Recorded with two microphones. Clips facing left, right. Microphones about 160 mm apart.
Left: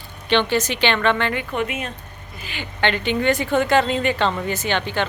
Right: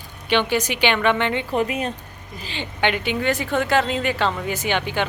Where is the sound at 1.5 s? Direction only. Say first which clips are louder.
Right 3 dB; 35° right (ahead or behind).